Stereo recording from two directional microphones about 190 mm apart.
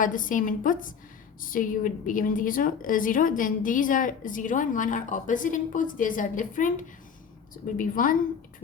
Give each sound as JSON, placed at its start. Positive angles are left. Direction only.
{"t": 0.0, "sound": "a woman's voice", "side_deg": 45}